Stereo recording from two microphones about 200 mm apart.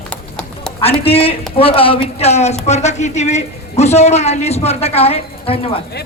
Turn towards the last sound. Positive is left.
turn(degrees=30)  # may be behind; listen again after turning